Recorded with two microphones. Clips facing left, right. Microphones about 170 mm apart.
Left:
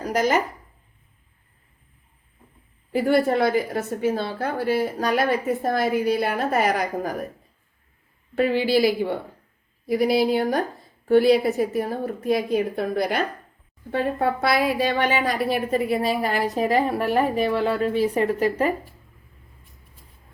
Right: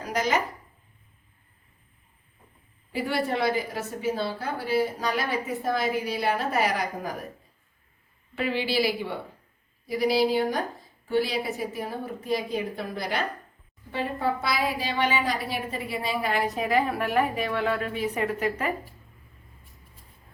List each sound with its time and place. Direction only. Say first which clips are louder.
0.0 s speech: left 5 dB; 45° left (ahead or behind)
2.9 s a woman's voice: left 8 dB; 50° left (ahead or behind)
8.4 s a woman's voice: left 7 dB; 45° left (ahead or behind)